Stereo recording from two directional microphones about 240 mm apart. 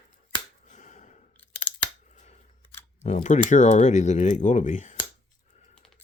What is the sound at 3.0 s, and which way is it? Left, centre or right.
Speech, left.